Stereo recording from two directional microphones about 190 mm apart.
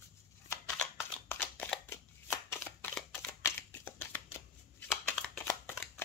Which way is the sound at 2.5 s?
10° left (ahead or behind).